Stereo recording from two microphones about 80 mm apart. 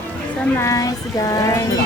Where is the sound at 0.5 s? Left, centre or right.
Left.